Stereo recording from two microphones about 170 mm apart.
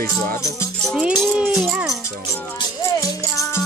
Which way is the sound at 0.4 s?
20° left (ahead or behind).